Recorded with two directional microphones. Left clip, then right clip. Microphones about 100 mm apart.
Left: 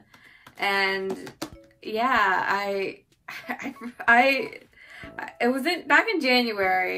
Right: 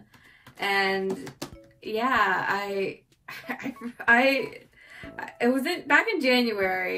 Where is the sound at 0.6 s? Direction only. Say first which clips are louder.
Left 1 dB; 25° left (ahead or behind).